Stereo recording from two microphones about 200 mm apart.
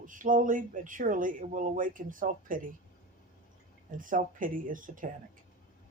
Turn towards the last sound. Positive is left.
turn(degrees=-40)  # may be behind; listen again after turning